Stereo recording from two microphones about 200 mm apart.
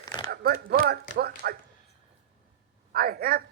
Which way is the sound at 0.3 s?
50° right (ahead or behind).